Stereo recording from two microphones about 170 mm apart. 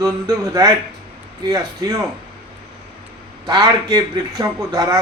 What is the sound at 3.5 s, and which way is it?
Speech, 25° right (ahead or behind).